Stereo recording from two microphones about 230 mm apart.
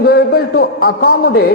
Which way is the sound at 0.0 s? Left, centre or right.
Left.